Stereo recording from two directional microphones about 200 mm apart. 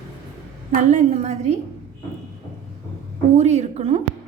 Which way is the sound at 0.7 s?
35° right (ahead or behind).